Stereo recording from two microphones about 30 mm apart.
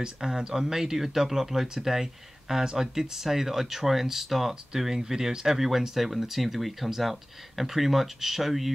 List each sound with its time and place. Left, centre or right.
0.0 s speech: right; by 8.7 s centre